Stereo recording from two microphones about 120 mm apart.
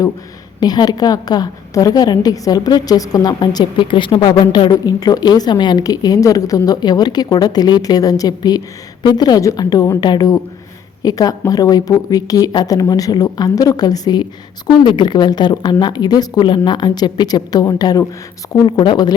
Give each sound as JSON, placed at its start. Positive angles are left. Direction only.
{"t": 0.6, "sound": "a woman's voice", "side_deg": 35}